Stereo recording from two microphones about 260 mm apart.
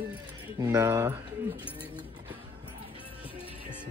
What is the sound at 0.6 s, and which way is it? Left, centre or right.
Speech, centre.